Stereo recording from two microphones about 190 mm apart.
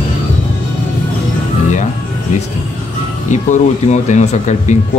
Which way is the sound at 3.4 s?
40° left (ahead or behind).